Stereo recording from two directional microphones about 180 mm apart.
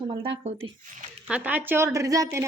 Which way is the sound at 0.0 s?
30° right (ahead or behind).